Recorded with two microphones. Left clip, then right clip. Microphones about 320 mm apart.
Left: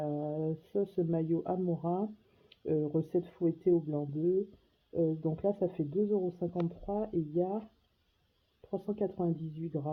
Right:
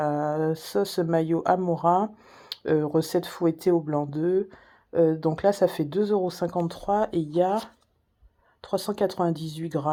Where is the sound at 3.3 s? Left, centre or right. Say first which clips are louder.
Right 6 dB; right.